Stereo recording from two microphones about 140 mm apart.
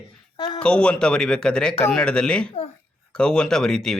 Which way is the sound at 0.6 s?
5° left (ahead or behind).